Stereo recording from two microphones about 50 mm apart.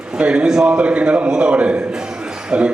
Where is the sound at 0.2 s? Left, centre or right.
Centre.